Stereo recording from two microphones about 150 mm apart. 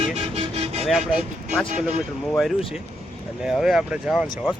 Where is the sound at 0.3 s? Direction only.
40° right (ahead or behind).